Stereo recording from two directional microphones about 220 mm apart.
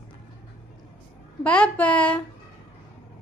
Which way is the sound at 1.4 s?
5° left (ahead or behind).